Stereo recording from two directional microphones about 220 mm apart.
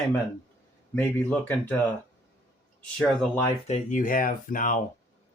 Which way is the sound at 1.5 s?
5° left (ahead or behind).